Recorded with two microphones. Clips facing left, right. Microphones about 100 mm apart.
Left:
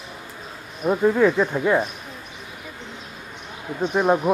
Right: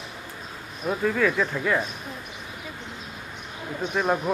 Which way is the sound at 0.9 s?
25° left (ahead or behind).